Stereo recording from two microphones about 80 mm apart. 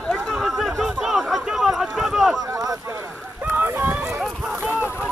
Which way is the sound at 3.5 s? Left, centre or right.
Right.